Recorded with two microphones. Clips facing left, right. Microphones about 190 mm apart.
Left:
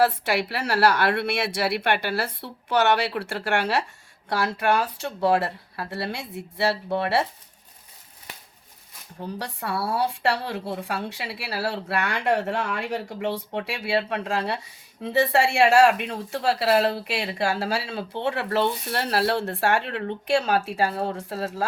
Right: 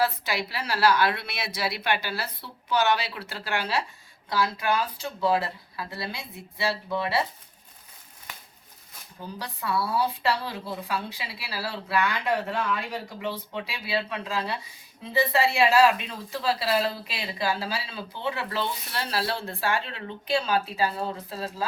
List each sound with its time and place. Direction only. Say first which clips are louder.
0.0 s speech: left 5 dB; 70° left (ahead or behind)
9.2 s speech: left 2 dB; 70° left (ahead or behind)
15.6 s speech: left 3 dB; 60° left (ahead or behind)